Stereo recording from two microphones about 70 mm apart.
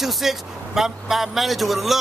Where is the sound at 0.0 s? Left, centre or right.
Centre.